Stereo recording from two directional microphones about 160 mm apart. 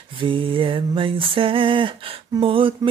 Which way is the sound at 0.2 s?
30° right (ahead or behind).